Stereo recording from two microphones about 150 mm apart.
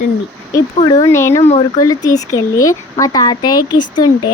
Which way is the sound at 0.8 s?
25° left (ahead or behind).